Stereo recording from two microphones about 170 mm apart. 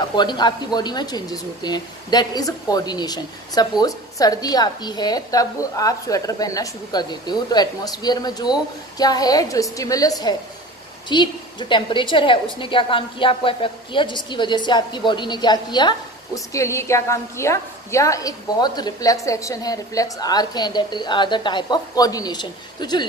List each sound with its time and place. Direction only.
0.1 s a woman's voice: 25° left (ahead or behind)